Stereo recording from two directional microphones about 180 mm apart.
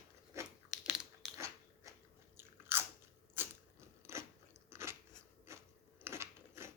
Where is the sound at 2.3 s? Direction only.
15° right (ahead or behind).